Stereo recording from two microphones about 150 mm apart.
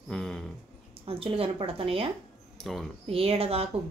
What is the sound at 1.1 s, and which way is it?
Speech, 40° right (ahead or behind).